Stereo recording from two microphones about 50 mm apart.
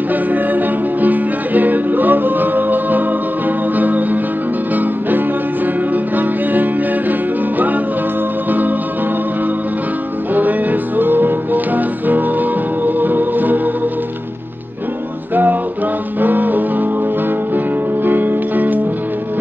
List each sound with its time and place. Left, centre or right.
1.0 s music: right
6.1 s music: right
10.3 s music: right
16.2 s music: right
18.0 s music: right